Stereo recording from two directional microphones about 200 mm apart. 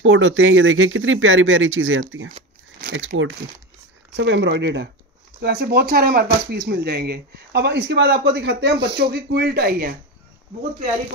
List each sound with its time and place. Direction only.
0.0 s speech: 75° right (ahead or behind)
4.2 s speech: 60° right (ahead or behind)